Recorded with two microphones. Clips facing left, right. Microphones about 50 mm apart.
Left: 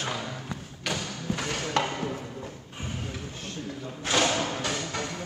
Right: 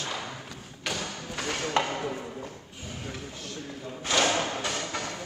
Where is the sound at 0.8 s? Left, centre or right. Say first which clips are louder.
Left 2 dB; centre.